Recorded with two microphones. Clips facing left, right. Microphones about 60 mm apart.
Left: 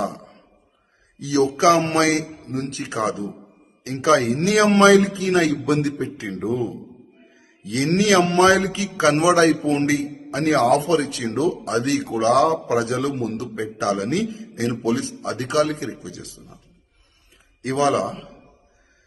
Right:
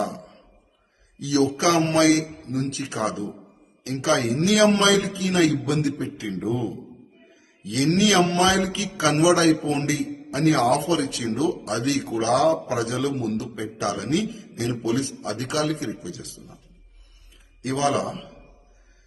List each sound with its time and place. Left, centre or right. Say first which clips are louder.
0.0 s a sound: left 1 dB; left
1.2 s a man's voice: left 3 dB; left
17.6 s a man's voice: left 3 dB; left